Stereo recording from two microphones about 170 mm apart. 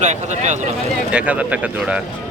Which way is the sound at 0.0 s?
45° right (ahead or behind).